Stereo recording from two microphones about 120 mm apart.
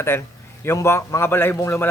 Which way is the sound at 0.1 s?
20° left (ahead or behind).